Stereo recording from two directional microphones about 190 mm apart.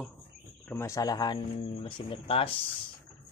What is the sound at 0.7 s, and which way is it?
Speech, 15° left (ahead or behind).